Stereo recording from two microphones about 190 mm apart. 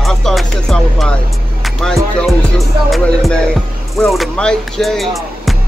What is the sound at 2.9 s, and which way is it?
Vehicle, centre (ahead or behind).